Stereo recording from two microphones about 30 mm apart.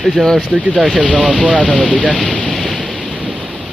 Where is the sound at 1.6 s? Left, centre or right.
Left.